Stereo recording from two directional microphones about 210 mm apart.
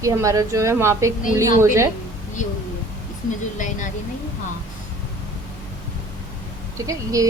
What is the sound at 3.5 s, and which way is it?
Speech, 35° left (ahead or behind).